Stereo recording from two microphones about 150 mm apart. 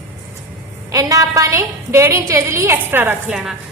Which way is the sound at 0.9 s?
25° right (ahead or behind).